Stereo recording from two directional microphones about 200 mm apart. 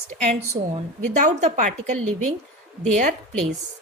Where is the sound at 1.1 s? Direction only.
35° right (ahead or behind).